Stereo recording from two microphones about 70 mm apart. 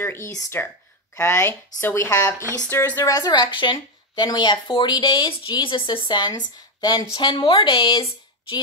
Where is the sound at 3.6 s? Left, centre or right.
Left.